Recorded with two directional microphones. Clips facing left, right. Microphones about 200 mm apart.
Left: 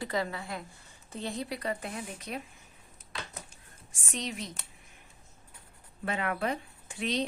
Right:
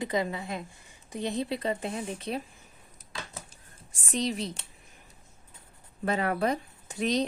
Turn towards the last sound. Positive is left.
turn(degrees=-40)  # may be behind; listen again after turning